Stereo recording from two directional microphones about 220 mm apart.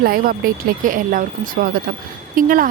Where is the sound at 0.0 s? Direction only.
40° right (ahead or behind).